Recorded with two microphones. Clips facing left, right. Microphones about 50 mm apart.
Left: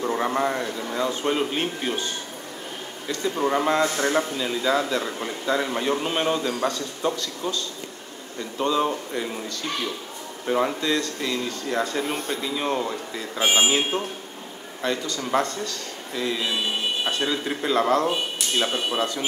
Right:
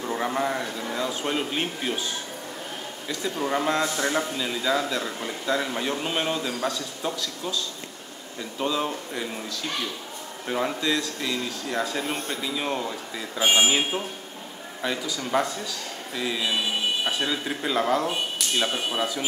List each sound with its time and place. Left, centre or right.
0.0 s a man's voice: centre
10.4 s a man's voice: centre
13.4 s speech: centre
13.7 s a man's voice: centre